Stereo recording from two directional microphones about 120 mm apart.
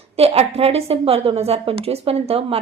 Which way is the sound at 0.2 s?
60° right (ahead or behind).